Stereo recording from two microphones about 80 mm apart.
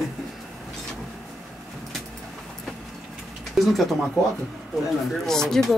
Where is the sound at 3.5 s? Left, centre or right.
Centre.